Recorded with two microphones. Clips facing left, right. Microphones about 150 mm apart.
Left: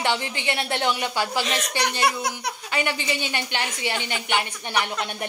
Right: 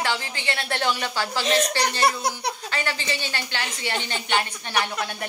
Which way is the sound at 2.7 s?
15° left (ahead or behind).